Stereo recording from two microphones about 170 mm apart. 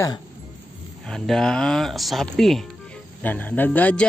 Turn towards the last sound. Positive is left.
turn(degrees=10)  # may be behind; listen again after turning